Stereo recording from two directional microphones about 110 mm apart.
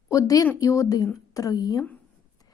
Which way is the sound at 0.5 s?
30° left (ahead or behind).